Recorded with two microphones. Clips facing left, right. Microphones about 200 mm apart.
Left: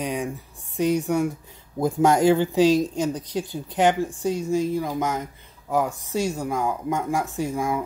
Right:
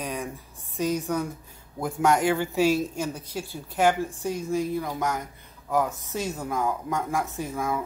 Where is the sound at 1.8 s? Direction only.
25° left (ahead or behind).